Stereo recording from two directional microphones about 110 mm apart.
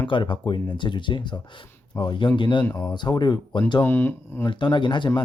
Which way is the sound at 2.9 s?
40° left (ahead or behind).